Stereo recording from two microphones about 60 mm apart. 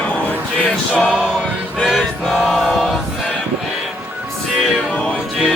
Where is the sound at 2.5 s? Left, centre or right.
Centre.